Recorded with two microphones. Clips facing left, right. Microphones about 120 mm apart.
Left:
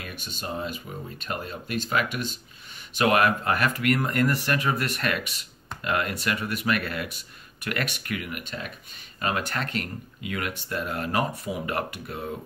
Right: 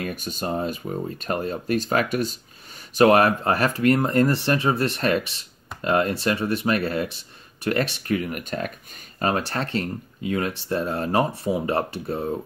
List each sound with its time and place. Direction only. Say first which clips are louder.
0.0 s speech: right 8 dB; 40° right (ahead or behind)
9.2 s speech: right 4 dB; 35° right (ahead or behind)